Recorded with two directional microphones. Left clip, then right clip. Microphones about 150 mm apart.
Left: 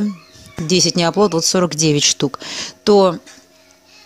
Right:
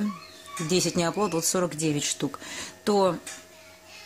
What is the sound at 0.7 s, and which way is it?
Speech, 40° left (ahead or behind).